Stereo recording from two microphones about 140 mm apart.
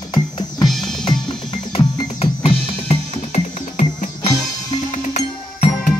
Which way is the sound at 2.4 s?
50° left (ahead or behind).